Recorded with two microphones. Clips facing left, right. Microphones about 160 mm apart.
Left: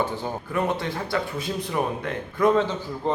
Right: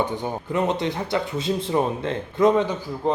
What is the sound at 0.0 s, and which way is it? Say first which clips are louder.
Speech: right 2 dB; 20° right (ahead or behind).